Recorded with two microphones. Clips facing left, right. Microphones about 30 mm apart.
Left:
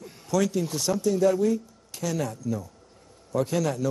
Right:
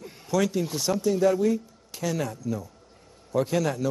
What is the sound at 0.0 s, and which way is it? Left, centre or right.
A man's voice, centre.